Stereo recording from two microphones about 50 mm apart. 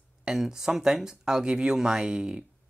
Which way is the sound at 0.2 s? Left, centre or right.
Centre.